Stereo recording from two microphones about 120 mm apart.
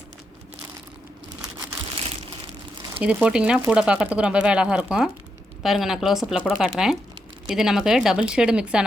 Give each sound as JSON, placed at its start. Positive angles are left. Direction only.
{"t": 3.0, "sound": "speech", "side_deg": -10}